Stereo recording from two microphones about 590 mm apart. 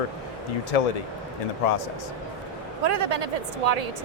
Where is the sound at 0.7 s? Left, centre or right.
Left.